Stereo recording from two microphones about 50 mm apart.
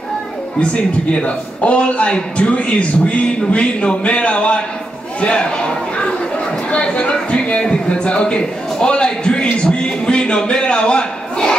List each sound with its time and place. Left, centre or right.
0.6 s a man's voice: left
5.2 s a sound: centre
7.6 s a man's voice: centre